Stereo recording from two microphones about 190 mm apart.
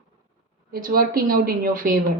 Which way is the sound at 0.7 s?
50° right (ahead or behind).